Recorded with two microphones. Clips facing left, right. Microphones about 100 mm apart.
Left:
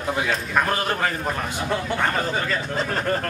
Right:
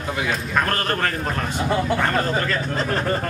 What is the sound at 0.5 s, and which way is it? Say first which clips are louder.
A man's voice: even; 10° left (ahead or behind).